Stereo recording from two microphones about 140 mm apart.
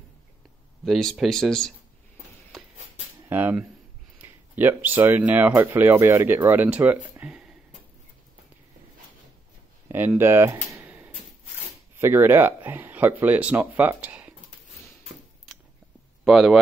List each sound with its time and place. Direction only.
0.8 s speech: centre (ahead or behind)
3.3 s speech: 15° right (ahead or behind)
9.8 s a sound: 15° right (ahead or behind)
12.0 s speech: 15° right (ahead or behind)
16.3 s speech: 5° right (ahead or behind)